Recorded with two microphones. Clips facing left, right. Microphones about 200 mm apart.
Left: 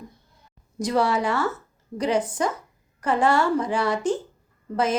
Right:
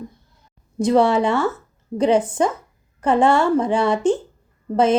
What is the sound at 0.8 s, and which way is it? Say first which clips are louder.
A woman's voice: right 7 dB; 25° right (ahead or behind).